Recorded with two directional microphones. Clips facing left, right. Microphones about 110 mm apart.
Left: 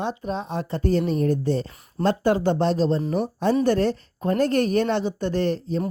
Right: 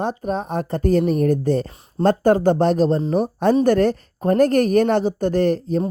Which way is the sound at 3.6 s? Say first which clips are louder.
Right 4 dB; 50° right (ahead or behind).